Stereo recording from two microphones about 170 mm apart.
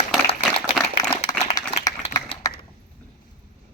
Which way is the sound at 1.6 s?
20° left (ahead or behind).